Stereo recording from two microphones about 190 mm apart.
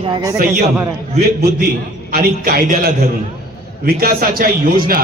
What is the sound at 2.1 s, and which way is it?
A man's voice, 50° right (ahead or behind).